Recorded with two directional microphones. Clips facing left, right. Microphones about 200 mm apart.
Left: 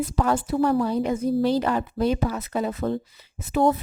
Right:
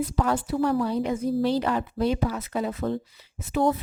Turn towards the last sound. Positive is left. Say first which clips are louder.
# left 3 dB
turn(degrees=50)  # may be behind; listen again after turning